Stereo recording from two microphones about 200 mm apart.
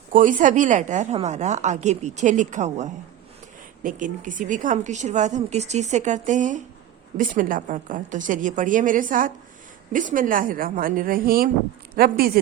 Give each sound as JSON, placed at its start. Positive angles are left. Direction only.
{"t": 0.1, "sound": "a woman's voice", "side_deg": -40}